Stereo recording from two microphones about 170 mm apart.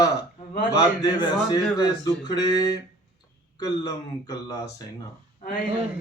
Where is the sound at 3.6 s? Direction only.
20° left (ahead or behind).